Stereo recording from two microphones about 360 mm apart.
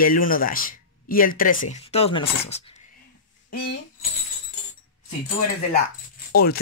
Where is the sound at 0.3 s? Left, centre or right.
Left.